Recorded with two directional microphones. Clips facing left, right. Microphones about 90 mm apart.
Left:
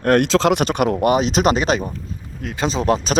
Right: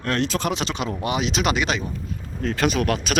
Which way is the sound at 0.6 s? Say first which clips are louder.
Left 8 dB; 55° left (ahead or behind).